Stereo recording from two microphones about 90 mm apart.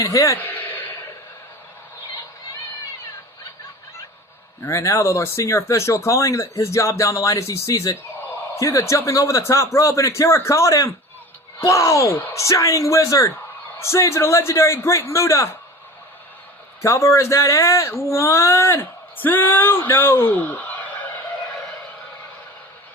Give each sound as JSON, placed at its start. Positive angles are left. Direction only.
{"t": 0.0, "sound": "speech", "side_deg": 35}
{"t": 0.4, "sound": "a sound", "side_deg": 20}
{"t": 4.6, "sound": "speech", "side_deg": 35}
{"t": 16.8, "sound": "speech", "side_deg": 35}